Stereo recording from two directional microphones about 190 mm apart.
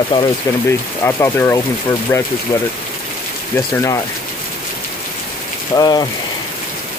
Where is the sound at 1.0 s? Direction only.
10° left (ahead or behind).